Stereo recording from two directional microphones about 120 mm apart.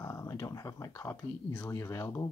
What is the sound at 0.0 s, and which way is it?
Speech, 25° left (ahead or behind).